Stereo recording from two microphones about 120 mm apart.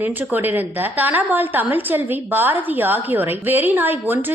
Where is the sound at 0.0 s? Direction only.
15° right (ahead or behind).